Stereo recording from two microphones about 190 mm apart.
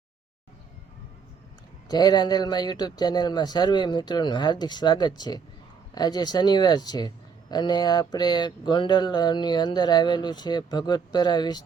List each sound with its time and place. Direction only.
1.9 s speech: 20° left (ahead or behind)